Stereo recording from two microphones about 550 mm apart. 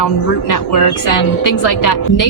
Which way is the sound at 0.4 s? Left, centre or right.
Left.